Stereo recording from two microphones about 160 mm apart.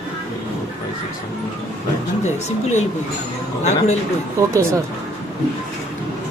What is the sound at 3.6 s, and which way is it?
Speech, 45° left (ahead or behind).